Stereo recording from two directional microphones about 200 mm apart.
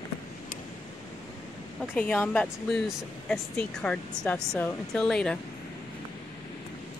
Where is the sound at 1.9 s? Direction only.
5° left (ahead or behind).